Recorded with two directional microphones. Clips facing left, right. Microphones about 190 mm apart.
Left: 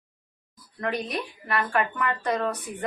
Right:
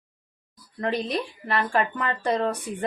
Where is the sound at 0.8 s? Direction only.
30° right (ahead or behind).